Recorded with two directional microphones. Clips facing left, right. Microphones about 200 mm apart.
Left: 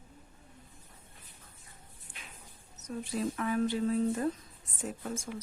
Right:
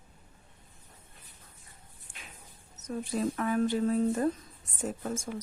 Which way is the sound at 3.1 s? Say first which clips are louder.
Right 2 dB; 50° right (ahead or behind).